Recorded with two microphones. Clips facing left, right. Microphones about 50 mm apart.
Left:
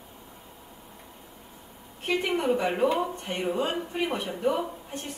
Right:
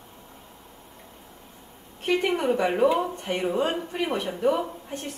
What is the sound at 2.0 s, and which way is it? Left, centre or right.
Speech, right.